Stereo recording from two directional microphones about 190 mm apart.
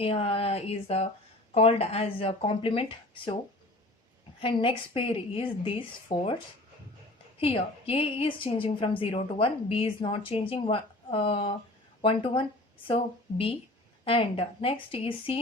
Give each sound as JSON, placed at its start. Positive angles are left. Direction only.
{"t": 0.0, "sound": "a woman's voice", "side_deg": 30}
{"t": 4.4, "sound": "a woman's voice", "side_deg": 25}
{"t": 7.3, "sound": "a woman's voice", "side_deg": 30}